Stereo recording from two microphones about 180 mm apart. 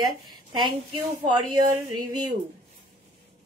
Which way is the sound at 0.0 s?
25° right (ahead or behind).